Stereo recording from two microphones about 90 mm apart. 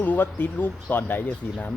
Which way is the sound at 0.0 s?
20° left (ahead or behind).